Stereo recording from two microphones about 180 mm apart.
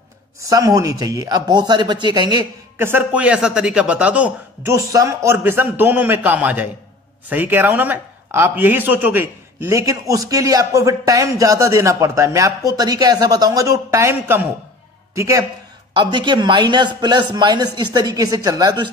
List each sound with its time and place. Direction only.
0.4 s speech: 20° right (ahead or behind)
2.9 s speech: 10° right (ahead or behind)